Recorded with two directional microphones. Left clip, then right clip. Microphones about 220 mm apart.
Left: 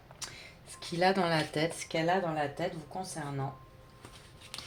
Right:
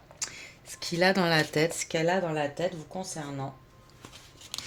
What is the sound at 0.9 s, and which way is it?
Speech, 40° right (ahead or behind).